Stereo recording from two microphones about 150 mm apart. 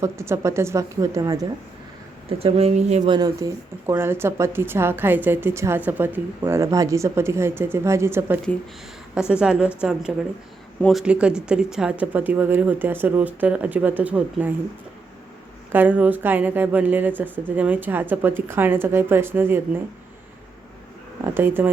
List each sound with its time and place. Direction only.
0.0 s speech: 20° right (ahead or behind)
2.4 s speech: 45° right (ahead or behind)
3.1 s speech: 25° right (ahead or behind)
9.1 s a woman's voice: 5° right (ahead or behind)
11.0 s speech: 5° right (ahead or behind)
15.7 s speech: 10° right (ahead or behind)
21.2 s speech: 15° right (ahead or behind)